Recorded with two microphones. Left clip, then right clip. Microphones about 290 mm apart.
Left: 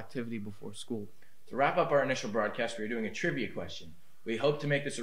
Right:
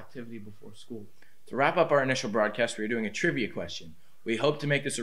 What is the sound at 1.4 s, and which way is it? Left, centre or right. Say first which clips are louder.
Speech: right 4 dB; right.